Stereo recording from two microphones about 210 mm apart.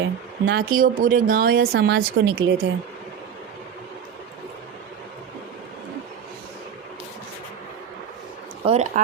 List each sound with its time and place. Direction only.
0.0 s speech: 60° right (ahead or behind)
8.6 s speech: 30° right (ahead or behind)